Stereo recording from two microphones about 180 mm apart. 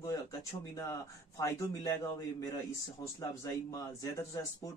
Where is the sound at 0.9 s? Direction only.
15° left (ahead or behind).